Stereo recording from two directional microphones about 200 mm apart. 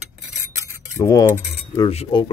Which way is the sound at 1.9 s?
25° left (ahead or behind).